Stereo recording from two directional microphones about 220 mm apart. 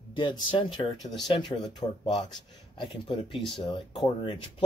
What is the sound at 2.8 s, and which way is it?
Speech, 20° left (ahead or behind).